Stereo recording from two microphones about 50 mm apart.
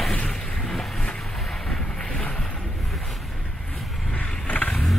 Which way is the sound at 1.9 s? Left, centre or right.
Centre.